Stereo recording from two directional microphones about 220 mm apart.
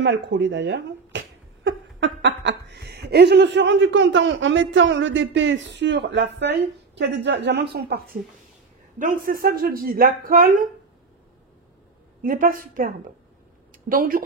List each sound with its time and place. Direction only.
0.0 s speech: 55° right (ahead or behind)
12.2 s speech: 40° right (ahead or behind)